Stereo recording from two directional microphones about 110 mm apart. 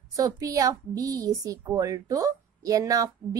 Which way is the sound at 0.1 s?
35° right (ahead or behind).